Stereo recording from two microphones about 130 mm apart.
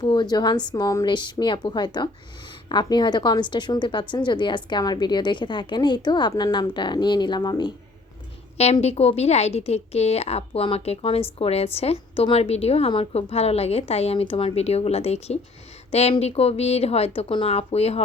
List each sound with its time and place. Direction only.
0.0 s a woman's voice: 30° left (ahead or behind)
8.5 s a woman's voice: 55° left (ahead or behind)